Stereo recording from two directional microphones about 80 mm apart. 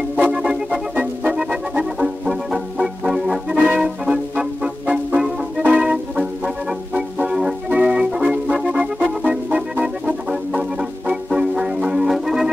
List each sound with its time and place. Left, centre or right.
0.1 s organ: centre
1.4 s music: centre